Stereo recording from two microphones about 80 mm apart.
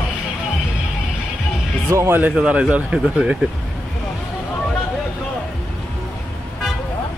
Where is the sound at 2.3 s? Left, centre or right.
Centre.